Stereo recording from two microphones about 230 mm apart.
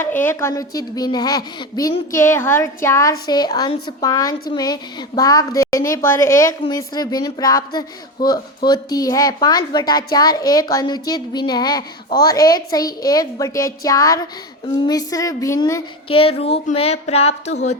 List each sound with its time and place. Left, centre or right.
0.0 s a woman's voice: centre; by 17.7 s left